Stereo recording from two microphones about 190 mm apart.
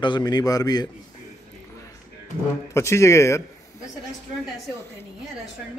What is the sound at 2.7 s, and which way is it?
A man's voice, 15° left (ahead or behind).